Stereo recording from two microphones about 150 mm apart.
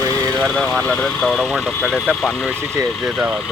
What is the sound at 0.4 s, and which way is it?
Speech, 5° left (ahead or behind).